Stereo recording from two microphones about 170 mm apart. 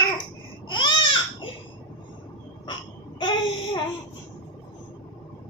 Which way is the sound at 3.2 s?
25° left (ahead or behind).